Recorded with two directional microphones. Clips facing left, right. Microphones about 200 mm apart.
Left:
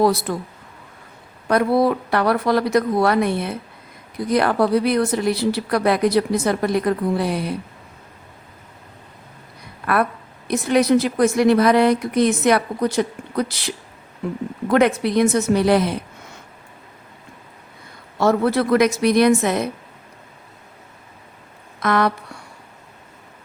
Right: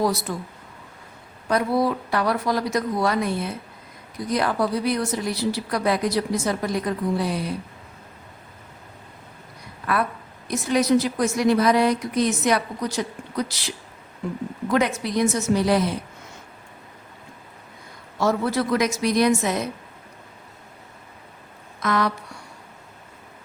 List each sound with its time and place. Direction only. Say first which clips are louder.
0.0 s a woman's voice: left 5 dB; 60° left (ahead or behind)
1.5 s a woman's voice: left 4 dB; 60° left (ahead or behind)
9.8 s a woman's voice: left 4 dB; 60° left (ahead or behind)
18.2 s a woman's voice: left 5 dB; 60° left (ahead or behind)
21.8 s a sound: left 4 dB; 60° left (ahead or behind)